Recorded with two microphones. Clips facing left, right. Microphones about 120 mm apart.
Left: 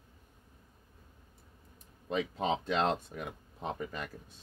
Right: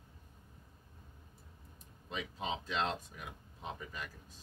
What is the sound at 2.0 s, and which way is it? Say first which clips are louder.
Speech: left 8 dB; 60° left (ahead or behind).